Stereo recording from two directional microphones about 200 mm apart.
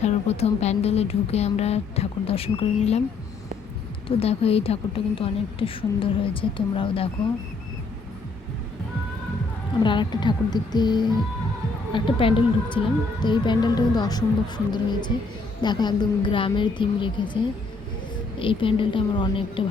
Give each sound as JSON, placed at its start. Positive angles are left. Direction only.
{"t": 0.0, "sound": "a woman's voice", "side_deg": 30}
{"t": 4.2, "sound": "speech", "side_deg": 30}
{"t": 9.8, "sound": "speech", "side_deg": 25}